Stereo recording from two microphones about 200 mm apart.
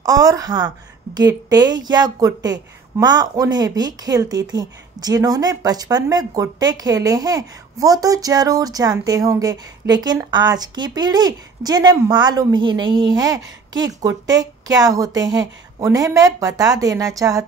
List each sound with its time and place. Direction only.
0.0 s a woman's voice: 20° right (ahead or behind)